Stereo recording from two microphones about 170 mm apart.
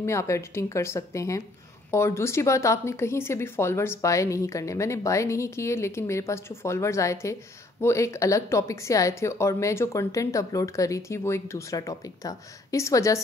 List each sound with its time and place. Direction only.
0.0 s speech: 15° left (ahead or behind)